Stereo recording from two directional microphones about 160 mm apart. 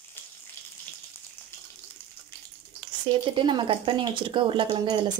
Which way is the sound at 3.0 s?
30° right (ahead or behind).